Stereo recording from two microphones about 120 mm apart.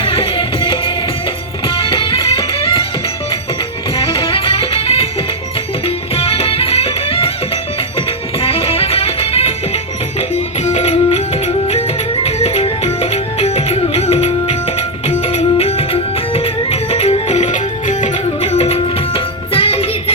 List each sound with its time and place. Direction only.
0.0 s music: 50° left (ahead or behind)
3.9 s music: 45° left (ahead or behind)
10.2 s music: 70° left (ahead or behind)